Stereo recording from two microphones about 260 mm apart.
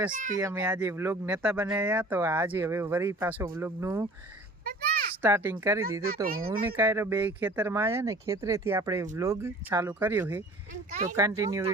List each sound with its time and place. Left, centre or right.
0.1 s a child's voice: right
0.3 s speech: centre
4.6 s a sound: right
5.2 s speech: centre
6.2 s speech: right
6.5 s speech: centre